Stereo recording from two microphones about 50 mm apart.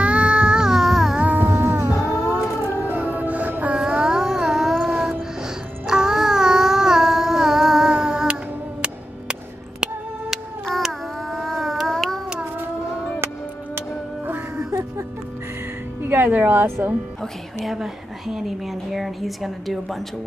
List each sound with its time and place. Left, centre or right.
0.0 s a sound: right; by 1.1 s centre
1.2 s music: right
2.7 s music: right
3.7 s music: centre
10.8 s a sound: centre
13.7 s music: right
14.7 s music: right
16.0 s music: right
17.6 s a woman's voice: centre